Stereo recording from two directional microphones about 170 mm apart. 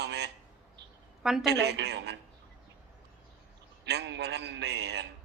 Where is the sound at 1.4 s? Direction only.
80° right.